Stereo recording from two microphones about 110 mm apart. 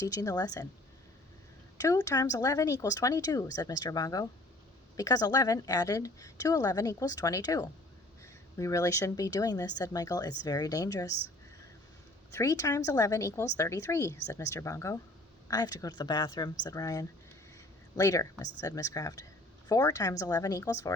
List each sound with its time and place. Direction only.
0.0 s a woman's voice: 30° left (ahead or behind)
1.8 s a woman's voice: 30° left (ahead or behind)
12.3 s a woman's voice: 30° left (ahead or behind)